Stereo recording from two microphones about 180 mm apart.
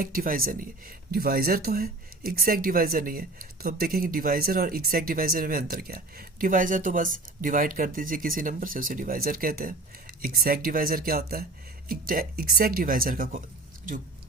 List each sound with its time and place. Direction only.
0.0 s speech: 50° right (ahead or behind)